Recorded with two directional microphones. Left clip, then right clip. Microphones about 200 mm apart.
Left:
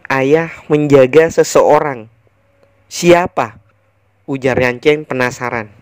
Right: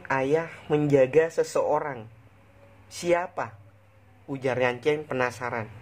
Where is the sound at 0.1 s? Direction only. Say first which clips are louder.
Left 12 dB; 40° left (ahead or behind).